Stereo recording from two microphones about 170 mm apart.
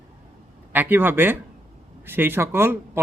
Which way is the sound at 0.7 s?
10° right (ahead or behind).